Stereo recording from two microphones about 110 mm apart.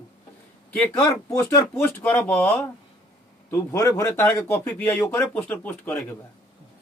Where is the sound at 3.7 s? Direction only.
30° left (ahead or behind).